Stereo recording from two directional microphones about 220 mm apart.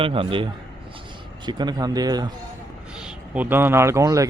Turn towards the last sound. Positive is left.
turn(degrees=-15)  # may be behind; listen again after turning